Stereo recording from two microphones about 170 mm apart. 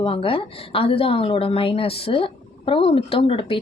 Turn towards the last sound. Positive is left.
turn(degrees=30)  # may be behind; listen again after turning